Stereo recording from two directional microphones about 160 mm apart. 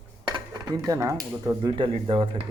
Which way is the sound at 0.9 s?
20° right (ahead or behind).